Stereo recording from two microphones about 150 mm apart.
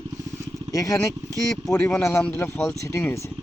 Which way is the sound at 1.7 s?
15° left (ahead or behind).